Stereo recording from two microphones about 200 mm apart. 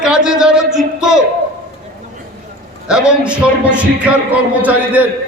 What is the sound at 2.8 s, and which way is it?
A man's voice, 5° right (ahead or behind).